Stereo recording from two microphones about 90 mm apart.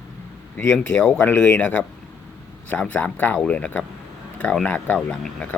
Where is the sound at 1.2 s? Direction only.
20° left (ahead or behind).